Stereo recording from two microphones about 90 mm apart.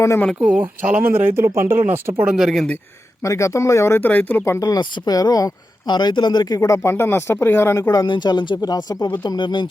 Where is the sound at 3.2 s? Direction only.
35° left (ahead or behind).